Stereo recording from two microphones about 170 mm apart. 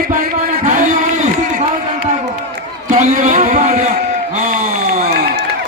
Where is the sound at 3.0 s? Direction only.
45° right (ahead or behind).